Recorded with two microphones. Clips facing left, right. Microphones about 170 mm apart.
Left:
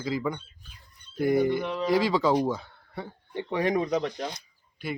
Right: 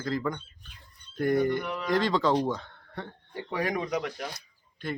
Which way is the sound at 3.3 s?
25° left (ahead or behind).